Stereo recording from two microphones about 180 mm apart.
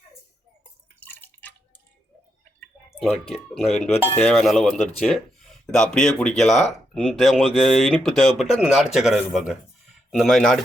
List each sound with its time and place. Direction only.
0.9 s drip: 10° left (ahead or behind)
3.0 s speech: centre (ahead or behind)